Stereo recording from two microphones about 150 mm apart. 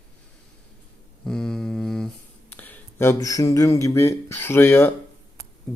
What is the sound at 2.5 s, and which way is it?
Speech, 10° left (ahead or behind).